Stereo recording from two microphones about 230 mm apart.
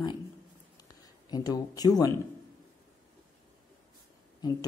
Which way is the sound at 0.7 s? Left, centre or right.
Centre.